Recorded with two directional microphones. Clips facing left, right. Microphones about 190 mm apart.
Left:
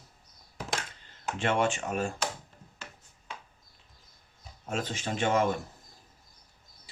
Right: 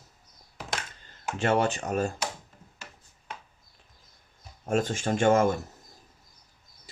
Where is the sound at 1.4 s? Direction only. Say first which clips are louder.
Right 3 dB; 40° right (ahead or behind).